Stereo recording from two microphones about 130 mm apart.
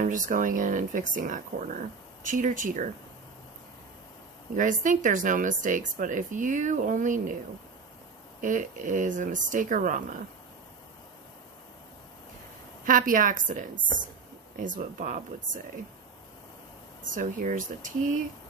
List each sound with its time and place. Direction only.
0.0 s speech: 85° right
4.6 s speech: 80° right
8.4 s speech: 85° right
12.8 s speech: 90° right
17.1 s speech: 85° right